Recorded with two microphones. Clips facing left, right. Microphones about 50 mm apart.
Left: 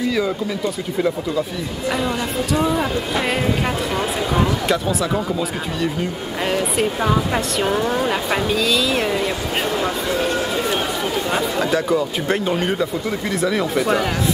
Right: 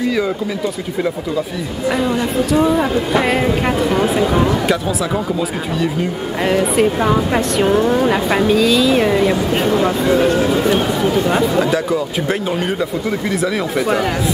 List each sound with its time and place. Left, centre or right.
1.9 s speech: centre
6.4 s speech: centre; by 10.6 s right
10.7 s speech: centre